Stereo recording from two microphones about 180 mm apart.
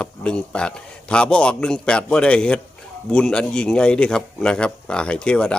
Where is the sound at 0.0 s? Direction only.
5° left (ahead or behind).